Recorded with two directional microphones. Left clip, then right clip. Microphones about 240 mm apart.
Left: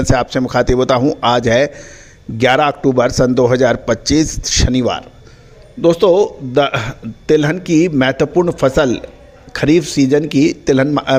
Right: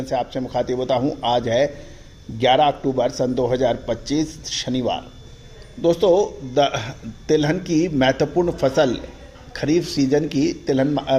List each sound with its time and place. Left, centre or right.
0.0 s a man's voice: left